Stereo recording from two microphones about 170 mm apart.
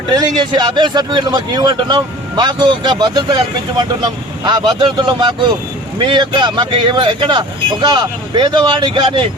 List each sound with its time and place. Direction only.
0.1 s a man's voice: 25° right (ahead or behind)